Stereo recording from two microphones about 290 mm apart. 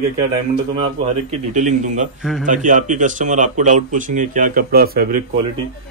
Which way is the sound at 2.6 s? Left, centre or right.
Right.